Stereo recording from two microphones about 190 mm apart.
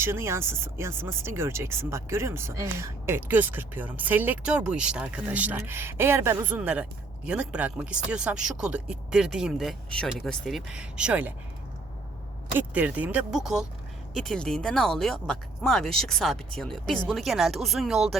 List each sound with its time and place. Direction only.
0.0 s speech: 15° right (ahead or behind)
12.5 s speech: 10° right (ahead or behind)